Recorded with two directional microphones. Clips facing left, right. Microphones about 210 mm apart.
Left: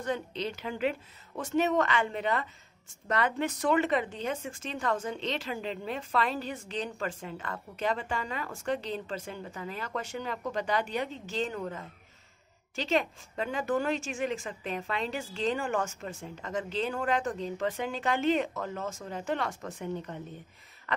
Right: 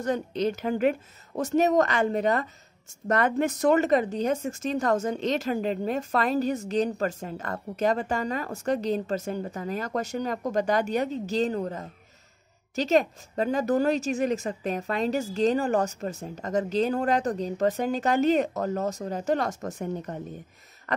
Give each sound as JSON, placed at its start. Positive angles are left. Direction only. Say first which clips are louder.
{"t": 0.0, "sound": "a woman's voice", "louder": "right 7 dB", "side_deg": -45}